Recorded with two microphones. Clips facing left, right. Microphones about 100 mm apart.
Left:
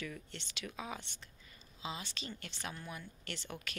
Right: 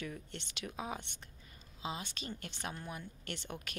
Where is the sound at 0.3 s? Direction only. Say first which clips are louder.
Right 2 dB; 50° right (ahead or behind).